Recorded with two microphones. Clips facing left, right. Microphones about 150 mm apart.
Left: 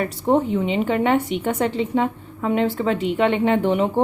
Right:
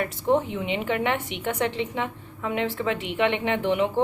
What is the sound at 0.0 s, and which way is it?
Speech, 40° left (ahead or behind).